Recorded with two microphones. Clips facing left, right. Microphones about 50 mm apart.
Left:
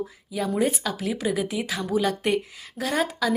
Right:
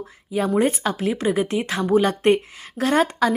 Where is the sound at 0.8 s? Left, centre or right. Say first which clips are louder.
Right 5 dB; right.